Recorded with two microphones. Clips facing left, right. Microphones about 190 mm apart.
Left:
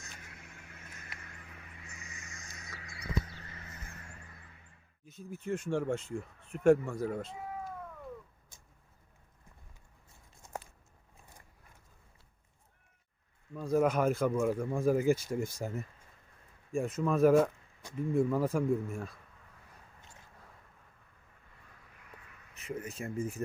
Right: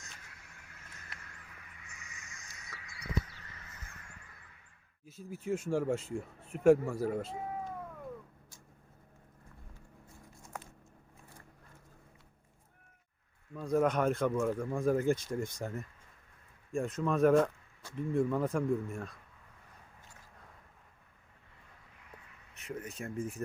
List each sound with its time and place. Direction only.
0.2 s vehicle: 20° left (ahead or behind)
2.9 s a sound: 30° left (ahead or behind)
5.0 s speech: 5° right (ahead or behind)
13.5 s speech: 5° left (ahead or behind)
22.5 s speech: centre (ahead or behind)